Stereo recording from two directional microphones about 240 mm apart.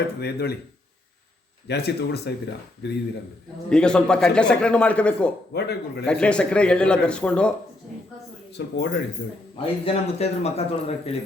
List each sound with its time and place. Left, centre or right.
0.2 s speech: left
1.6 s speech: left
3.7 s a man's voice: centre
5.5 s speech: left
6.1 s a man's voice: centre
8.5 s speech: left
9.6 s a man's voice: left